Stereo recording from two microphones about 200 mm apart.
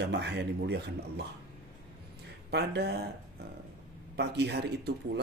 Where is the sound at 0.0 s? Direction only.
60° right (ahead or behind).